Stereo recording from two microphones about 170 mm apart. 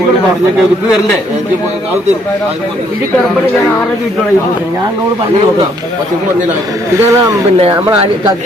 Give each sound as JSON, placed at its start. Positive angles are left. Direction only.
{"t": 7.1, "sound": "speech", "side_deg": -20}